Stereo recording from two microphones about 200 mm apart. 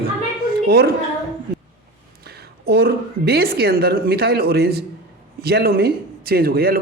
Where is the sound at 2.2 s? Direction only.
50° right (ahead or behind).